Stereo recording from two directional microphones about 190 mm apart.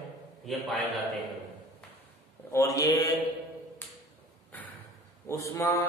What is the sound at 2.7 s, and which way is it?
Speech, 20° left (ahead or behind).